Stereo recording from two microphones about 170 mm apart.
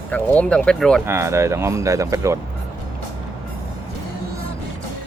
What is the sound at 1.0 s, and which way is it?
Speech, 15° right (ahead or behind).